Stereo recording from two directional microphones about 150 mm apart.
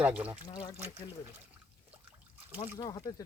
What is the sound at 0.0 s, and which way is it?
Speech, 10° right (ahead or behind).